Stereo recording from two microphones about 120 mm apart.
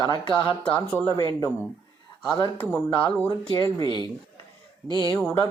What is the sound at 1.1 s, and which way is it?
Speech, 30° left (ahead or behind).